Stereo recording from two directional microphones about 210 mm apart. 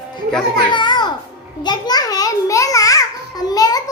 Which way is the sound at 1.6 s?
20° left (ahead or behind).